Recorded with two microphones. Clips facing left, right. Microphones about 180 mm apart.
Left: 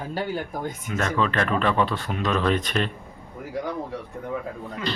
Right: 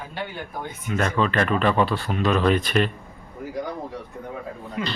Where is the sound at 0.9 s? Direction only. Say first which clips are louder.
Right 2 dB; 5° right (ahead or behind).